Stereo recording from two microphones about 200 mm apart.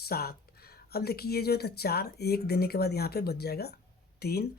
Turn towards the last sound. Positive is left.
turn(degrees=50)  # may be behind; listen again after turning